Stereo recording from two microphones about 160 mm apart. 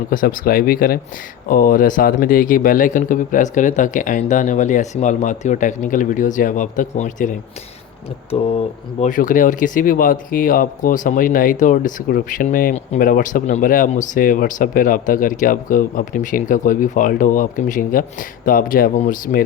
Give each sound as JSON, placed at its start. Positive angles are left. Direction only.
{"t": 0.1, "sound": "speech", "side_deg": 60}
{"t": 9.0, "sound": "speech", "side_deg": 55}